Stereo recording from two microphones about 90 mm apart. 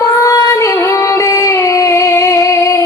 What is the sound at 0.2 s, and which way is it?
Singing, 35° left (ahead or behind).